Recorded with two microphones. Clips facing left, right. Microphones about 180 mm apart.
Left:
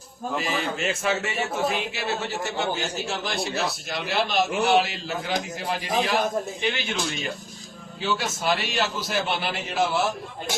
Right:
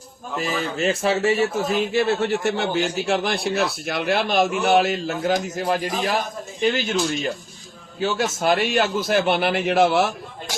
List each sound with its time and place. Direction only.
0.3 s speech: 40° right (ahead or behind)
1.9 s a man's voice: 50° right (ahead or behind)
8.0 s speech: 45° right (ahead or behind); by 10.1 s 65° right (ahead or behind)